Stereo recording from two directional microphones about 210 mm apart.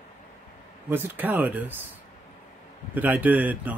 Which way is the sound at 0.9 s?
10° right (ahead or behind).